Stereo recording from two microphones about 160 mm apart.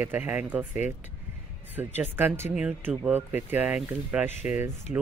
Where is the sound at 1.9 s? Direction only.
10° right (ahead or behind).